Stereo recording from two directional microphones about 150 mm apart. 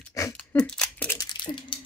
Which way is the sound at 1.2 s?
30° left (ahead or behind).